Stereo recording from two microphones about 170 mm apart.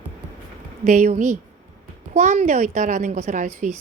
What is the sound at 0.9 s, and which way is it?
A woman's voice, 45° right (ahead or behind).